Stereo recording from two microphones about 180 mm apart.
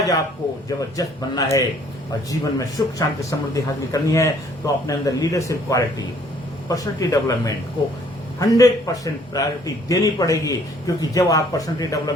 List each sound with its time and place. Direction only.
0.8 s a man's voice: 20° left (ahead or behind)